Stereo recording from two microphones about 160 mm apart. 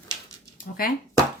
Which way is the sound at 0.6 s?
60° left (ahead or behind).